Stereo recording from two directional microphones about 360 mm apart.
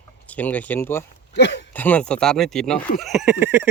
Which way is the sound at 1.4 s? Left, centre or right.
Left.